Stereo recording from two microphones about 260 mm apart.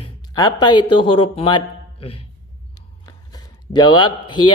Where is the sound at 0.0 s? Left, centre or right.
Centre.